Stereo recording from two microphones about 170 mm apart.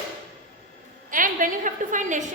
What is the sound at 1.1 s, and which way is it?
A woman's voice, 50° right (ahead or behind).